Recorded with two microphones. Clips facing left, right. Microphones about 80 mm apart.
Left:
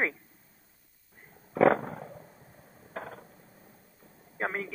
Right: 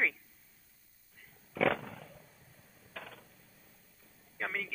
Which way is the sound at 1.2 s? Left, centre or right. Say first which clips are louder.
Left 9 dB; left.